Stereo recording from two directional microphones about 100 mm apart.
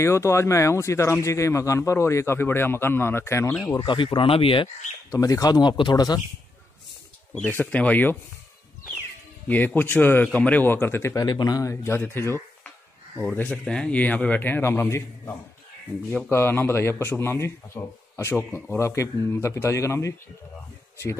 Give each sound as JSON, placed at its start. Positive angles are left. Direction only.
{"t": 0.0, "sound": "speech", "side_deg": 30}
{"t": 3.8, "sound": "speech", "side_deg": 55}
{"t": 5.1, "sound": "speech", "side_deg": 35}
{"t": 7.4, "sound": "a man's voice", "side_deg": 15}
{"t": 9.8, "sound": "speech", "side_deg": 20}
{"t": 11.2, "sound": "speech", "side_deg": 45}
{"t": 13.2, "sound": "a man's voice", "side_deg": 10}
{"t": 18.3, "sound": "a man's voice", "side_deg": 15}
{"t": 18.8, "sound": "speech", "side_deg": 30}